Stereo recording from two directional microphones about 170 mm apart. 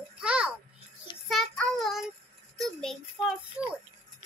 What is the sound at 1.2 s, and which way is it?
Child singing, centre (ahead or behind).